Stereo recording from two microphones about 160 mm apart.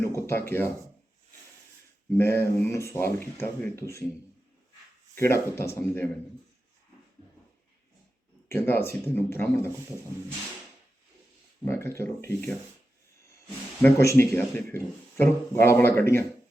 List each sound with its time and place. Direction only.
0.1 s speech: 15° left (ahead or behind)
2.1 s speech: 15° left (ahead or behind)
5.1 s speech: 15° left (ahead or behind)
8.4 s speech: 15° left (ahead or behind)
11.6 s speech: 15° left (ahead or behind)
13.8 s speech: 15° left (ahead or behind)